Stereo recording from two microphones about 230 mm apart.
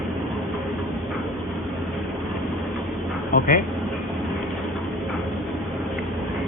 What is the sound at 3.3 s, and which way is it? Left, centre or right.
Speech, left.